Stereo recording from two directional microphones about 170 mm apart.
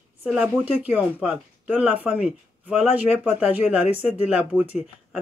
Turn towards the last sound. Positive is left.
turn(degrees=-10)  # may be behind; listen again after turning